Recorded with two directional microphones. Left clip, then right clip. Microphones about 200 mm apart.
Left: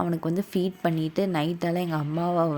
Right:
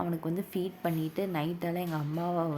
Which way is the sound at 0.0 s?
30° left (ahead or behind).